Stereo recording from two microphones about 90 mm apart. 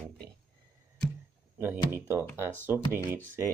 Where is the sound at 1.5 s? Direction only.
30° right (ahead or behind).